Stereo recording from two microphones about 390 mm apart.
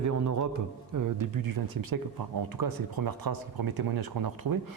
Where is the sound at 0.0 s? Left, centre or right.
Right.